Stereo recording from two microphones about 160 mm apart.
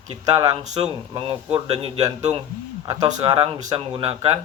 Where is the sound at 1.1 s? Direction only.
35° right (ahead or behind).